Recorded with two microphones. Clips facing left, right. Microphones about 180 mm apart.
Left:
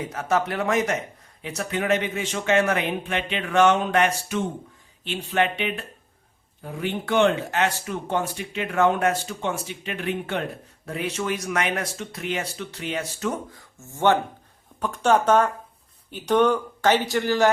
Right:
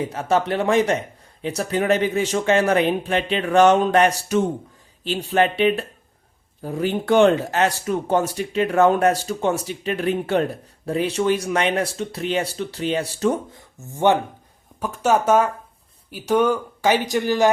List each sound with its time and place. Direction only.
0.0 s speech: 30° right (ahead or behind)